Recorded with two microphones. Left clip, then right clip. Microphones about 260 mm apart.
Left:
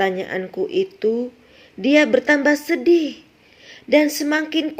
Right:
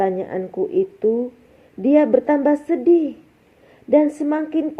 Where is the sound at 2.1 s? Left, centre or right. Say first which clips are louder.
Even; left.